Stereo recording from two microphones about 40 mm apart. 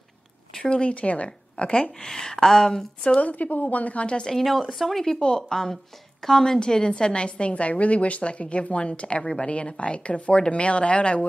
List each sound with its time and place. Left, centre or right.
0.7 s speech: left
2.0 s speech: centre
3.2 s speech: left
4.3 s speech: centre
5.0 s a woman's voice: centre